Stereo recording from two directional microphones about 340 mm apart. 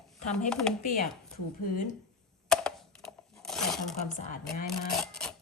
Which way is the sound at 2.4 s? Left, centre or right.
Centre.